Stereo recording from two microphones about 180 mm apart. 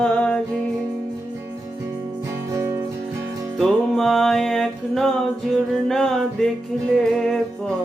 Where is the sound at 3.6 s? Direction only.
Centre (ahead or behind).